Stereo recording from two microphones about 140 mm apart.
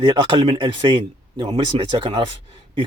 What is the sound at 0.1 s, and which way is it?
Speech, 25° right (ahead or behind).